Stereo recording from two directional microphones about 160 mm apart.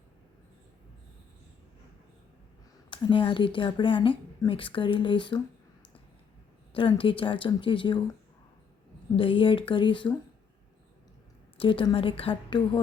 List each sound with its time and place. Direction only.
2.9 s speech: 30° left (ahead or behind)
6.7 s speech: 35° left (ahead or behind)
9.1 s speech: 35° left (ahead or behind)
11.5 s speech: 35° left (ahead or behind)